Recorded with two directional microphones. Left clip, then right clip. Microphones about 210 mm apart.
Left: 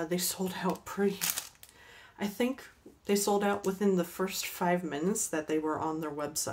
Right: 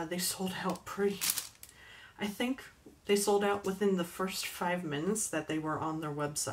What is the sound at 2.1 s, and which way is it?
Speech, 45° left (ahead or behind).